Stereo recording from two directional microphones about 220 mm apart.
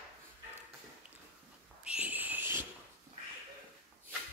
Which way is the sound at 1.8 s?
5° right (ahead or behind).